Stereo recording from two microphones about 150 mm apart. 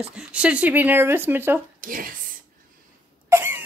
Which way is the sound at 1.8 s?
70° right (ahead or behind).